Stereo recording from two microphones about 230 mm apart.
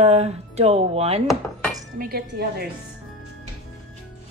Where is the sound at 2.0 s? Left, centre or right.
Right.